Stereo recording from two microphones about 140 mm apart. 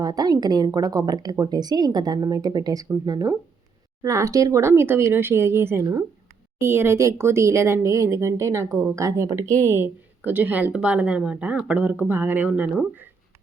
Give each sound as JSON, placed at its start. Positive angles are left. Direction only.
{"t": 0.0, "sound": "speech", "side_deg": -30}